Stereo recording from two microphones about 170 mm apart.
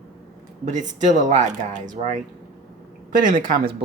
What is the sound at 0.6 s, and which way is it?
Speech, 45° right (ahead or behind).